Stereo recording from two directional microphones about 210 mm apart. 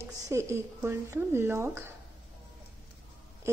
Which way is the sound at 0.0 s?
15° right (ahead or behind).